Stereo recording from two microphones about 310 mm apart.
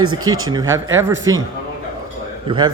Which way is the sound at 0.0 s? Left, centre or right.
Right.